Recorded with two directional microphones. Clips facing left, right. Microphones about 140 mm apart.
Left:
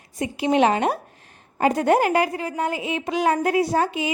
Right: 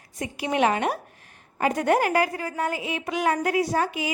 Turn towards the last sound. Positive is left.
turn(degrees=25)  # may be behind; listen again after turning